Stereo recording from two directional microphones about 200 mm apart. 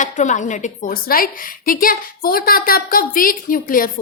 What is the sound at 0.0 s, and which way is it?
A woman's voice, 40° left (ahead or behind).